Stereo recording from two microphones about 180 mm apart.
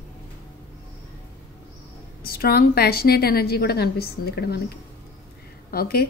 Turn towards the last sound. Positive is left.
turn(degrees=60)  # may be behind; listen again after turning